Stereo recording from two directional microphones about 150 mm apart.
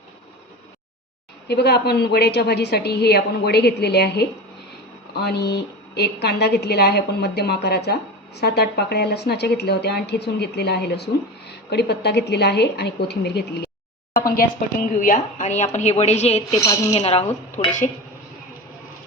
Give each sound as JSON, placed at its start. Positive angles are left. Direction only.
{"t": 1.5, "sound": "a woman's voice", "side_deg": 90}
{"t": 14.3, "sound": "a woman's voice", "side_deg": 65}
{"t": 16.6, "sound": "a woman's voice", "side_deg": 20}
{"t": 16.9, "sound": "a woman's voice", "side_deg": 40}
{"t": 17.6, "sound": "speech", "side_deg": 55}